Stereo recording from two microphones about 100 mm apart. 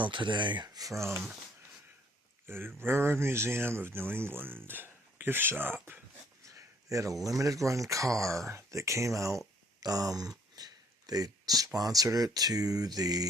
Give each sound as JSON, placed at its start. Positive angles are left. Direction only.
{"t": 0.0, "sound": "speech", "side_deg": -55}
{"t": 1.1, "sound": "speech", "side_deg": -5}
{"t": 2.5, "sound": "speech", "side_deg": -25}
{"t": 6.9, "sound": "speech", "side_deg": -35}
{"t": 9.8, "sound": "a sound", "side_deg": -40}
{"t": 11.8, "sound": "speech", "side_deg": -35}